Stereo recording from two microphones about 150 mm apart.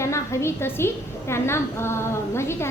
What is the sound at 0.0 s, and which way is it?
A woman's voice, 20° left (ahead or behind).